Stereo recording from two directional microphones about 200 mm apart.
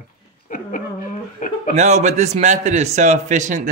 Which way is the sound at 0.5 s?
40° left (ahead or behind).